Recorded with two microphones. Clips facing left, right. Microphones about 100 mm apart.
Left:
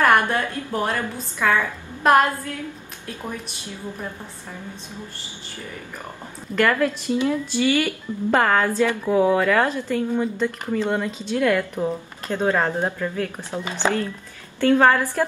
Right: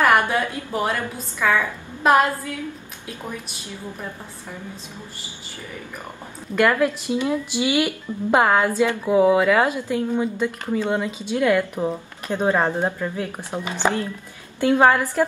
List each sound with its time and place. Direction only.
0.0 s speech: 10° right (ahead or behind)
6.5 s speech: 15° right (ahead or behind)